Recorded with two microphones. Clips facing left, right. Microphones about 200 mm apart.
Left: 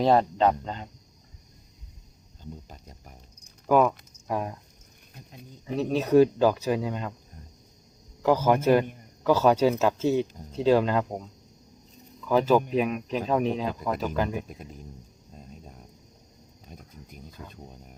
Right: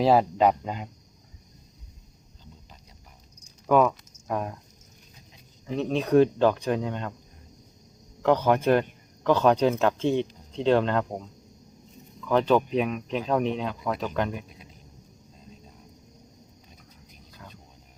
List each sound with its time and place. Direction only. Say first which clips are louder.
0.0 s speech: right 1 dB; 5° right (ahead or behind)
3.7 s keys jangling: even; 5° left (ahead or behind)
4.3 s speech: even; 5° left (ahead or behind)
5.1 s a sound: left 11 dB; 55° left (ahead or behind)
5.6 s speech: even; 5° left (ahead or behind)
8.2 s speech: even; 5° left (ahead or behind)
14.3 s speech: left 5 dB; 50° left (ahead or behind)
16.6 s a sound: left 6 dB; 50° left (ahead or behind)